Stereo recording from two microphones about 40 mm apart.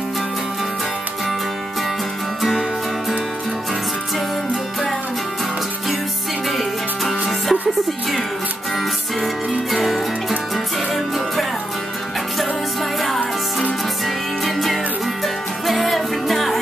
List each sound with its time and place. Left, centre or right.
6.5 s music: centre
8.7 s music: centre
14.0 s music: centre